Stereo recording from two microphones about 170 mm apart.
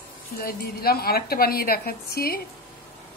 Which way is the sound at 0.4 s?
60° left (ahead or behind).